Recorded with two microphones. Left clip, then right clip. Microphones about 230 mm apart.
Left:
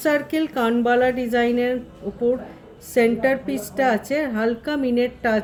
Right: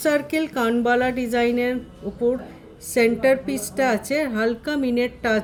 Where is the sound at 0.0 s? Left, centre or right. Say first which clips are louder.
Even; right.